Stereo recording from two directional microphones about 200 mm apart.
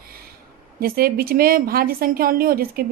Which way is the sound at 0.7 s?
50° right (ahead or behind).